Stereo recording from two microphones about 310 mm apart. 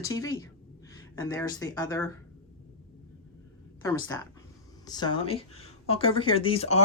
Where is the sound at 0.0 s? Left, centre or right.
Centre.